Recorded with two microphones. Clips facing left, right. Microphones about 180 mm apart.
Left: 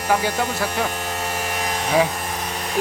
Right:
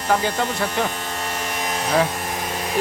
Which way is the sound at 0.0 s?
10° left (ahead or behind).